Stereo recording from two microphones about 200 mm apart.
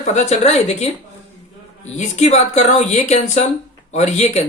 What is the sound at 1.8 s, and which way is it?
Speech, 35° left (ahead or behind).